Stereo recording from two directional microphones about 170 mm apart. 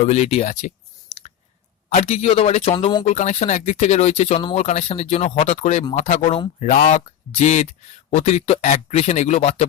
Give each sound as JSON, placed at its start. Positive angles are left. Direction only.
{"t": 0.0, "sound": "speech", "side_deg": 40}
{"t": 1.9, "sound": "speech", "side_deg": 40}
{"t": 3.1, "sound": "speech", "side_deg": 45}
{"t": 6.7, "sound": "speech", "side_deg": 50}